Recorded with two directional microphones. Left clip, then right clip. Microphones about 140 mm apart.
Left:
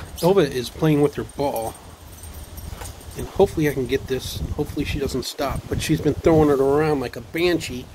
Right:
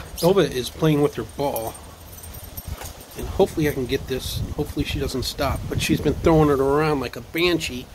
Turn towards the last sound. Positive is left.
turn(degrees=0)  # may be behind; listen again after turning